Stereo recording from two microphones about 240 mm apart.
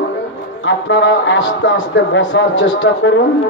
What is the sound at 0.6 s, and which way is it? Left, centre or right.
Speech, left.